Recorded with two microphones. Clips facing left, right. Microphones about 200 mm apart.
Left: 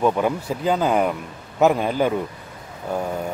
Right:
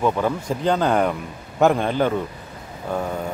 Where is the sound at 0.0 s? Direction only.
10° left (ahead or behind).